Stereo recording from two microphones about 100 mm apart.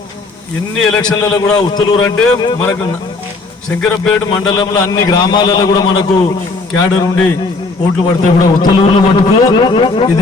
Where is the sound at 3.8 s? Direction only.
15° left (ahead or behind).